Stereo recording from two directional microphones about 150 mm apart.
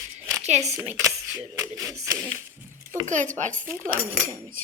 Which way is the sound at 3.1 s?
55° right (ahead or behind).